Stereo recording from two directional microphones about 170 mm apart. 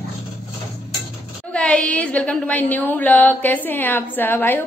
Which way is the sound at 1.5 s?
5° left (ahead or behind).